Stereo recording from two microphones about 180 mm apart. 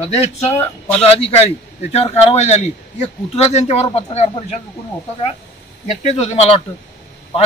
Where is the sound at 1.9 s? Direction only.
35° left (ahead or behind).